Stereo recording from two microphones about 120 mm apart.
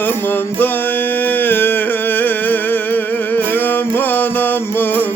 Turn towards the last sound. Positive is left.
turn(degrees=15)  # may be behind; listen again after turning